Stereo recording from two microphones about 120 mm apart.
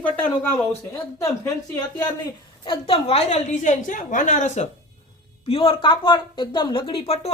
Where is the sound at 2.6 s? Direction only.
50° left (ahead or behind); by 4.7 s 90° left.